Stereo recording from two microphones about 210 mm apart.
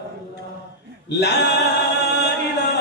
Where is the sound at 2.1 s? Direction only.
50° left (ahead or behind).